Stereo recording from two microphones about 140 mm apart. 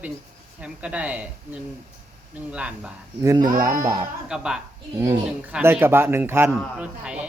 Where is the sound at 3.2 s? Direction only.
25° right (ahead or behind).